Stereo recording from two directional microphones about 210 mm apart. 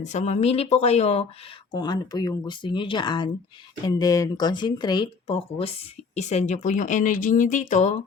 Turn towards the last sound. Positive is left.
turn(degrees=35)  # may be behind; listen again after turning